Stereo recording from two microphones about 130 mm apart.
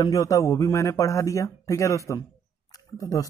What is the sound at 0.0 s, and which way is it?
Speech, 25° left (ahead or behind).